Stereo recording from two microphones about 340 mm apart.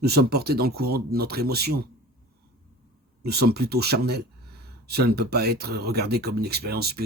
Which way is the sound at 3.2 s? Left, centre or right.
Right.